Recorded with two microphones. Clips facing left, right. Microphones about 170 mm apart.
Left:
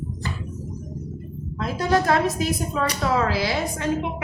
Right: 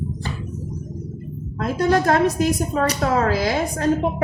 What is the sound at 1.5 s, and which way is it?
A woman's voice, 45° right (ahead or behind).